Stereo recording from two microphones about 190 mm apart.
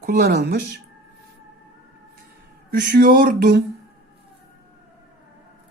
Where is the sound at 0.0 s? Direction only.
55° right (ahead or behind).